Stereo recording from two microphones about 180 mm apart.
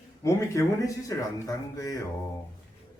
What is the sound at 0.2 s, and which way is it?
A man's voice, 15° left (ahead or behind).